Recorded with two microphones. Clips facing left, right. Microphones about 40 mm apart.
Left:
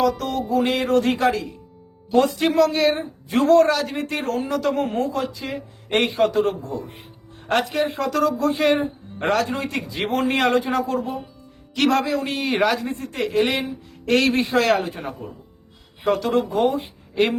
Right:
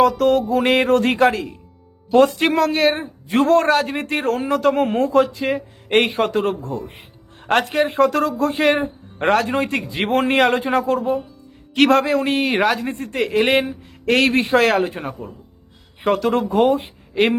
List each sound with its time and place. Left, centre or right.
0.2 s music: right
2.1 s a man's voice: right
7.4 s music: right
9.2 s a man's voice: right
16.0 s a man's voice: right